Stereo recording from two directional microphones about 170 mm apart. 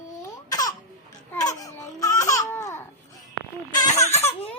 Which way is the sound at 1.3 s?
20° left (ahead or behind).